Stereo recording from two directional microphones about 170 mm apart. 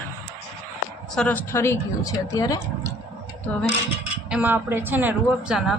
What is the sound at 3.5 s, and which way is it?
Speech, 5° left (ahead or behind).